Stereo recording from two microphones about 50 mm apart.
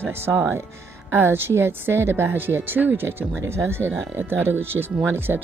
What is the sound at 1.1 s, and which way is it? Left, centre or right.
A woman's voice, right.